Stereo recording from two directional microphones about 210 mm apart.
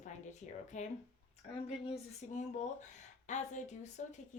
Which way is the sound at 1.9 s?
35° left (ahead or behind).